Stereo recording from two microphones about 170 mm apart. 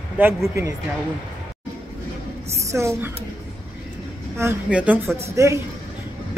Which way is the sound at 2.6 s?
15° right (ahead or behind).